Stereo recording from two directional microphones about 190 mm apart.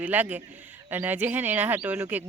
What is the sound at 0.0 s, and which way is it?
Speech, 10° right (ahead or behind).